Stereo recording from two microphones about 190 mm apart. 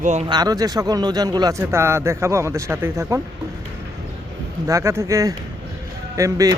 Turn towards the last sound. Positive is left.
turn(degrees=-15)  # may be behind; listen again after turning